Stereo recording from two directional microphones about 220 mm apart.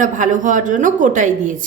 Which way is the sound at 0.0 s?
35° right (ahead or behind).